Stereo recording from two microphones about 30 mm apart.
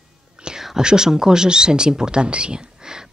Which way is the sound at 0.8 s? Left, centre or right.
Right.